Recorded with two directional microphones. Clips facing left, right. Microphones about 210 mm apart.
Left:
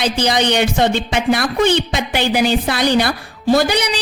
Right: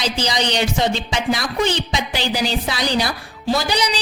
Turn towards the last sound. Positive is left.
turn(degrees=55)  # may be behind; listen again after turning